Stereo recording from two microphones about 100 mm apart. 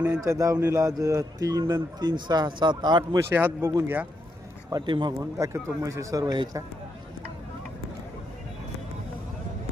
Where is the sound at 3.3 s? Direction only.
20° right (ahead or behind).